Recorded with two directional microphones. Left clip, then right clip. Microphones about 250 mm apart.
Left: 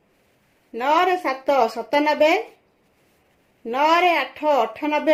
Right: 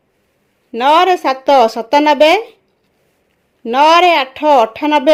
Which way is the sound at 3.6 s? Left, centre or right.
Right.